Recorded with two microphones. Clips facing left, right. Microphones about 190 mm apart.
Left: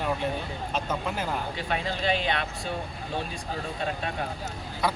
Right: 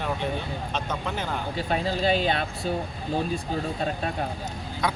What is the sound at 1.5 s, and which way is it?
Speech, 35° right (ahead or behind).